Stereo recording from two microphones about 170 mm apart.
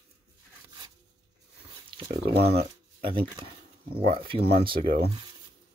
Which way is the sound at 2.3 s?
70° right (ahead or behind).